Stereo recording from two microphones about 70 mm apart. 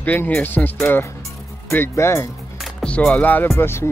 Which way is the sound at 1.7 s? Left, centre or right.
Left.